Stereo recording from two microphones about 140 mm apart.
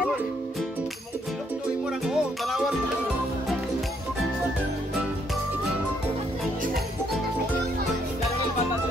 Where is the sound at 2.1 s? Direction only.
Centre (ahead or behind).